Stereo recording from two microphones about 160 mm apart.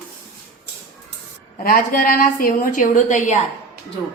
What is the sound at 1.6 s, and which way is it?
A woman's voice, 65° left (ahead or behind).